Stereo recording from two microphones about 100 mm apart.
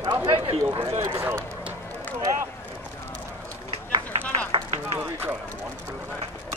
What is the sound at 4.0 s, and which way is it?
Run, 15° left (ahead or behind).